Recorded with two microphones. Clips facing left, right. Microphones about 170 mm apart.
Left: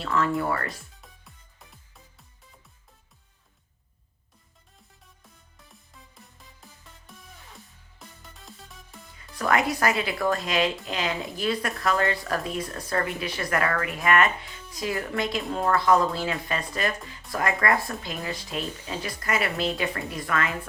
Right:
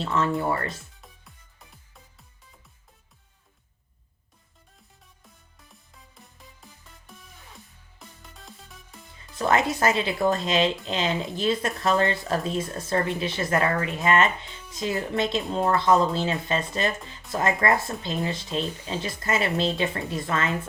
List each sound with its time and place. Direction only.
0.0 s speech: 20° right (ahead or behind)
1.0 s music: centre (ahead or behind)
7.1 s music: centre (ahead or behind)
9.1 s speech: 25° right (ahead or behind)